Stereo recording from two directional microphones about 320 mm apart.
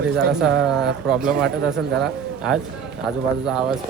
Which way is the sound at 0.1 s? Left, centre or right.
Right.